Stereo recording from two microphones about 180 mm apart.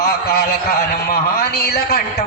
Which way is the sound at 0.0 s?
60° left (ahead or behind).